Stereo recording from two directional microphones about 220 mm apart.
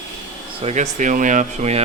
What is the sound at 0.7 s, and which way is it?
Speech, 30° right (ahead or behind).